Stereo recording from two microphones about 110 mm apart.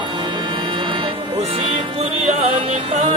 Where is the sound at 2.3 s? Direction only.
75° right (ahead or behind).